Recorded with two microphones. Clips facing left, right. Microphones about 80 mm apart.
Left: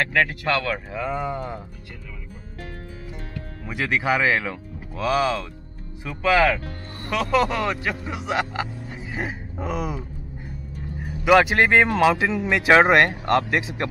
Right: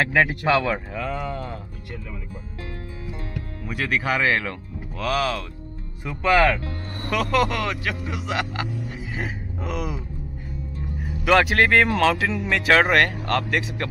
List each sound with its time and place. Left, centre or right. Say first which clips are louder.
0.0 s speech: right 2 dB; centre
0.9 s speech: left 2 dB; centre
3.7 s speech: left 1 dB; centre
11.2 s speech: left 2 dB; centre